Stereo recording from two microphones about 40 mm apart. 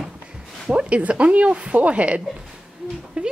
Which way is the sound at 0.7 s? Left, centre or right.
Right.